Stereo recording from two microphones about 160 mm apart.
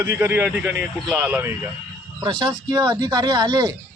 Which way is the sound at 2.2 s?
25° right (ahead or behind).